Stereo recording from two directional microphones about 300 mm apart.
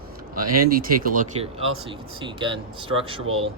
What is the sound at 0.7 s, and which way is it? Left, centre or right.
Speech, right.